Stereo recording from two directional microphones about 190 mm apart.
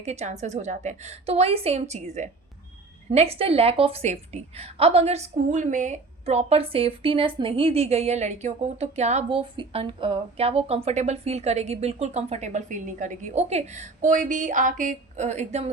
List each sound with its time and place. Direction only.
0.0 s a woman's voice: 35° right (ahead or behind)